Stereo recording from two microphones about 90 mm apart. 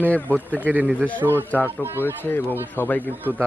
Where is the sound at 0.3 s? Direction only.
15° right (ahead or behind).